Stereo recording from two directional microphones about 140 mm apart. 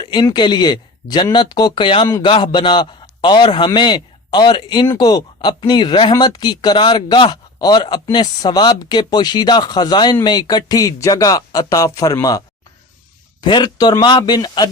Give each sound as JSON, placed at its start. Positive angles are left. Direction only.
{"t": 0.0, "sound": "a man's voice", "side_deg": 35}
{"t": 13.4, "sound": "a man's voice", "side_deg": 30}